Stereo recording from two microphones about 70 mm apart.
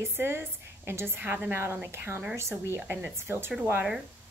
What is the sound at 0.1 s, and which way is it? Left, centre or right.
A woman's voice, right.